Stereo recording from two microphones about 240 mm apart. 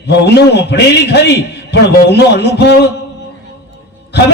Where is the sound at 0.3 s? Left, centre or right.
Left.